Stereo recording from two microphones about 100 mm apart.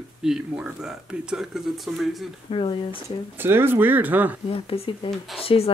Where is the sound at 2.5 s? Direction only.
70° left (ahead or behind).